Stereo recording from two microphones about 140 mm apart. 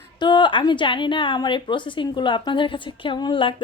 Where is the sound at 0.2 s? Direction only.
35° left (ahead or behind).